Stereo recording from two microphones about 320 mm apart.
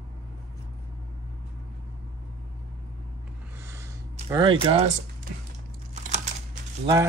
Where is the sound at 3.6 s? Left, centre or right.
Centre.